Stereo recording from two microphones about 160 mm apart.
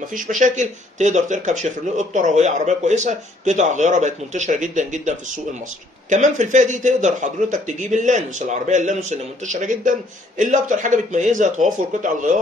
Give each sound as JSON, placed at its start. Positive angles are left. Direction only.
{"t": 0.1, "sound": "speech", "side_deg": -55}